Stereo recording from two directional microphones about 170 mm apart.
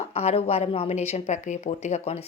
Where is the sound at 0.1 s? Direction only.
35° left (ahead or behind).